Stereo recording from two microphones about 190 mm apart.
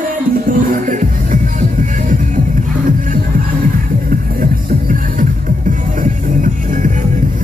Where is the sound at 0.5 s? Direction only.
45° right (ahead or behind).